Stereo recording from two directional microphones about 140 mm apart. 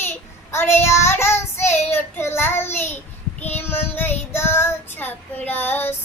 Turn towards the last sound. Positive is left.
turn(degrees=15)  # may be behind; listen again after turning